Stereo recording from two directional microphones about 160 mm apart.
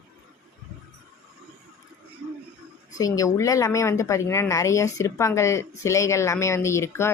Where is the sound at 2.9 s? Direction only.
20° left (ahead or behind).